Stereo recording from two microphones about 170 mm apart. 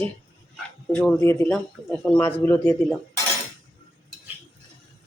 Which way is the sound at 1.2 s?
20° left (ahead or behind).